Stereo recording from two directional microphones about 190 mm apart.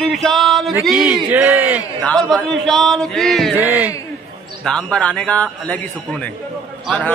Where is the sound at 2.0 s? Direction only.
5° left (ahead or behind).